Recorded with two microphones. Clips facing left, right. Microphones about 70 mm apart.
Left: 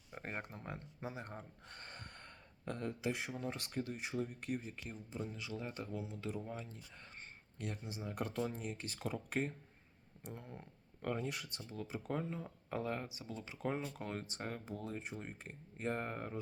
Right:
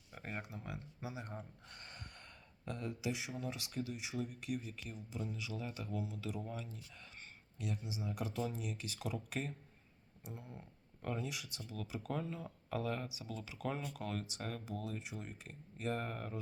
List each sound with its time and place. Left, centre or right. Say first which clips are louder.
0.1 s speech: left 1 dB; left
7.6 s speech: right 1 dB; left
10.2 s speech: left 1 dB; left